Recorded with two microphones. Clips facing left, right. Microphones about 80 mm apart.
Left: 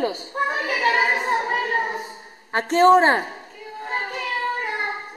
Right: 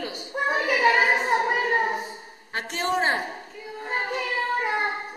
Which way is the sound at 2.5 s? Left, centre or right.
Left.